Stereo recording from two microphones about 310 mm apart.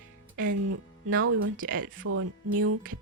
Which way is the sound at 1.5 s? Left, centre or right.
Right.